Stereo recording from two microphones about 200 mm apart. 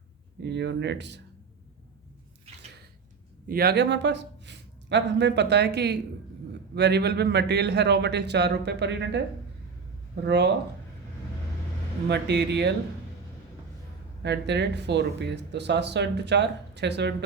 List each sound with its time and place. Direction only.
0.4 s speech: 60° right (ahead or behind)
3.5 s speech: 50° right (ahead or behind)
10.2 s speech: 60° right (ahead or behind)
12.0 s speech: 60° right (ahead or behind)
14.2 s speech: 60° right (ahead or behind)